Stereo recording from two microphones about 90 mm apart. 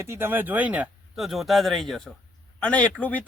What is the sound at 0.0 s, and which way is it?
Speech, 25° right (ahead or behind).